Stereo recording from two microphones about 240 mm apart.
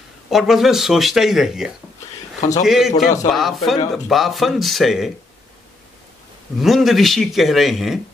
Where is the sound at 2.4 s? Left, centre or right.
Left.